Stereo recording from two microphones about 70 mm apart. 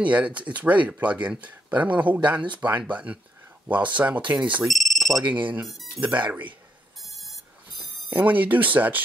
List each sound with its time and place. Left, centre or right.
0.0 s speech: right
4.6 s a sound: centre
5.2 s speech: right
7.7 s speech: right